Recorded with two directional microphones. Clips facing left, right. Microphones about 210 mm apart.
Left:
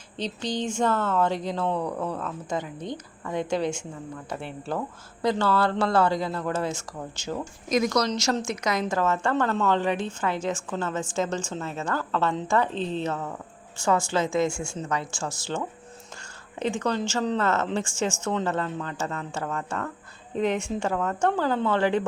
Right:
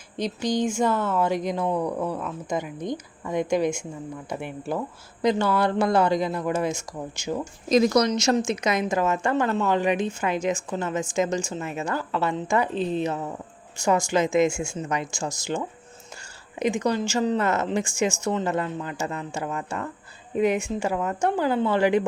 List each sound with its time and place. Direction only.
0.2 s speech: 10° right (ahead or behind)
7.7 s a woman's voice: 30° right (ahead or behind); by 22.0 s 10° right (ahead or behind)